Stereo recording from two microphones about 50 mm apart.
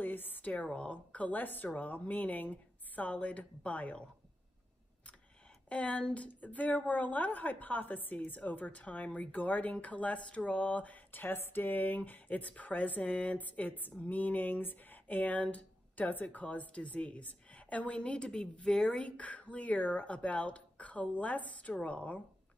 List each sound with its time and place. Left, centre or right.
0.0 s a sound: left
0.5 s a woman's voice: left
5.7 s a woman's voice: left